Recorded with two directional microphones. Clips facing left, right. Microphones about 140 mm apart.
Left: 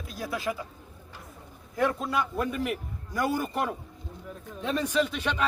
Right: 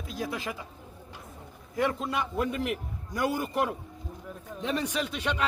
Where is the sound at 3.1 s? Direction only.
15° right (ahead or behind).